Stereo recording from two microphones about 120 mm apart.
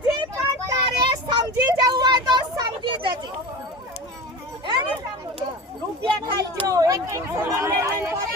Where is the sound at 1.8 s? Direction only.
35° right (ahead or behind).